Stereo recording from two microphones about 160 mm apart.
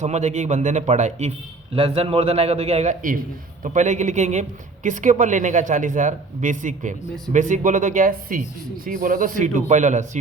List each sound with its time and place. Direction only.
0.0 s speech: 45° right (ahead or behind)
1.7 s a man's voice: 35° right (ahead or behind)